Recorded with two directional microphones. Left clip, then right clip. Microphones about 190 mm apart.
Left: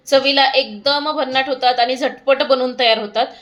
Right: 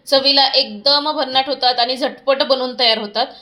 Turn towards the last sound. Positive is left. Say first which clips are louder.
# left 1 dB
turn(degrees=10)  # may be behind; listen again after turning